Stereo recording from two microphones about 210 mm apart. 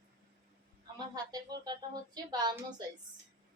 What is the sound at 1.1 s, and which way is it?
A woman's voice, 20° right (ahead or behind).